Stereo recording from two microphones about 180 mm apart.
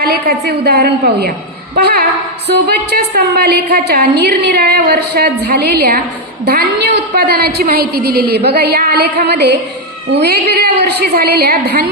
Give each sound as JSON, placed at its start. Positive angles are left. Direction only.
{"t": 0.0, "sound": "a woman's voice", "side_deg": -60}